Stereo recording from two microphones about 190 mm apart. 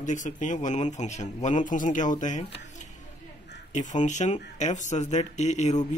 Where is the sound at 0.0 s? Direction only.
40° left (ahead or behind).